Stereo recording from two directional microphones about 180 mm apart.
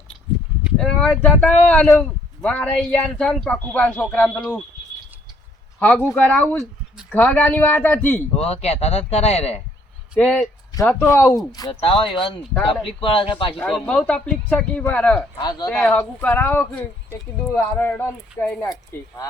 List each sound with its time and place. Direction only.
0.6 s speech: 5° left (ahead or behind)
5.8 s speech: 10° left (ahead or behind)
8.4 s a man's voice: 35° left (ahead or behind)
10.2 s speech: 10° left (ahead or behind)
11.7 s speech: 30° left (ahead or behind)
13.6 s speech: 5° left (ahead or behind)
15.4 s speech: 25° left (ahead or behind)
15.7 s speech: 5° left (ahead or behind)
18.6 s speech: 20° left (ahead or behind)